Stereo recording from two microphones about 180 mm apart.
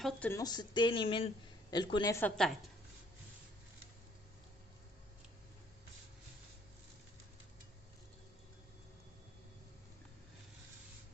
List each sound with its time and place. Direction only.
0.0 s speech: 10° left (ahead or behind)
2.2 s a woman's voice: 5° left (ahead or behind)